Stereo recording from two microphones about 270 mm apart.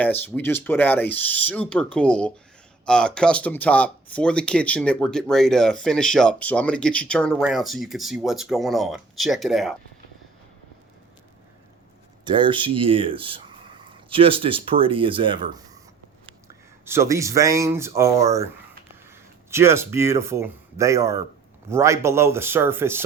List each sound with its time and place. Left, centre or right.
0.0 s speech: centre
12.2 s speech: centre
16.8 s speech: centre